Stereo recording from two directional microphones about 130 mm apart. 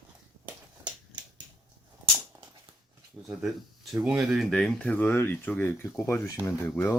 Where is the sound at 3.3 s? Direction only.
5° right (ahead or behind); by 6.9 s 20° left (ahead or behind).